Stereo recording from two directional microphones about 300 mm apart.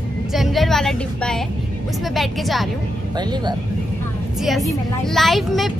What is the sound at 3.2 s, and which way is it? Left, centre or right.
Speech, centre.